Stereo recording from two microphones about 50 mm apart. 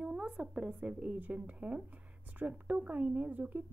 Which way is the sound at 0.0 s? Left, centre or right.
Centre.